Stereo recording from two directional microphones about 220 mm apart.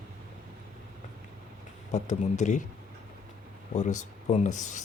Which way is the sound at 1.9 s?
30° left (ahead or behind).